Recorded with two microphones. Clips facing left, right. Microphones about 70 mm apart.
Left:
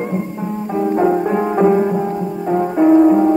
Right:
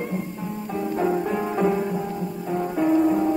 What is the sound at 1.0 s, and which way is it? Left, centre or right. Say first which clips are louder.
Music: left 7 dB; left.